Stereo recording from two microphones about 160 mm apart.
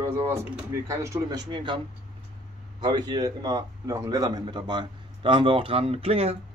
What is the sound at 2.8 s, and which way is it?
A man's voice, 25° right (ahead or behind).